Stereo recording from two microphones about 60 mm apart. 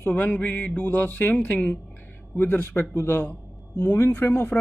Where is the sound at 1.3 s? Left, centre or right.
Left.